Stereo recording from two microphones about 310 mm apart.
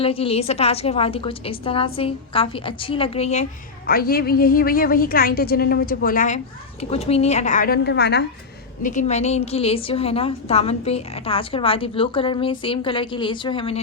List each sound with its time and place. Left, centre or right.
0.0 s a woman's voice: centre